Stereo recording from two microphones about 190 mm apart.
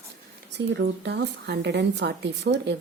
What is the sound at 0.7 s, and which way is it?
Speech, 65° right (ahead or behind).